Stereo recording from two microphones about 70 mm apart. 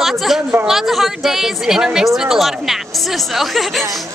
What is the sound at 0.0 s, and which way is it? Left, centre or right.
A woman's voice, centre.